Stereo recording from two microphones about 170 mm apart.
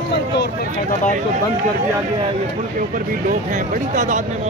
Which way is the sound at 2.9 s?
50° right (ahead or behind).